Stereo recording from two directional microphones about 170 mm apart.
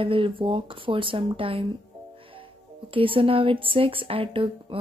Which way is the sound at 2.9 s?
30° right (ahead or behind).